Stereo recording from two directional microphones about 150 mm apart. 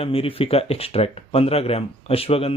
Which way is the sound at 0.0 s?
40° left (ahead or behind).